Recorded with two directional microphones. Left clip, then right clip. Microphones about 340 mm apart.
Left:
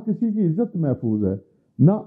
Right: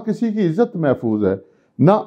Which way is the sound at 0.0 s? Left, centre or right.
Centre.